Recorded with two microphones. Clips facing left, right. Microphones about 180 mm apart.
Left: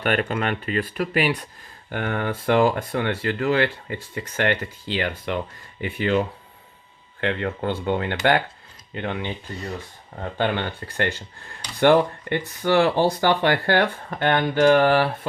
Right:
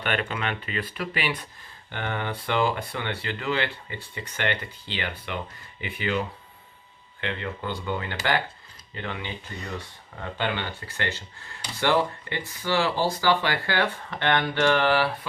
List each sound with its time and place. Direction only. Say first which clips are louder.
0.0 s speech: left 5 dB; 45° left (ahead or behind)
10.3 s speech: left 5 dB; 50° left (ahead or behind)